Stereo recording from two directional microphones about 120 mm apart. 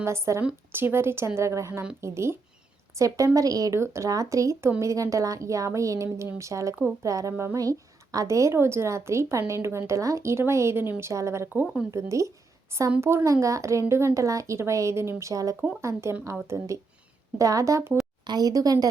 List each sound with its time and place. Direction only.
0.0 s a woman's voice: 25° right (ahead or behind); by 11.9 s 5° right (ahead or behind)
11.9 s a woman's voice: 25° right (ahead or behind)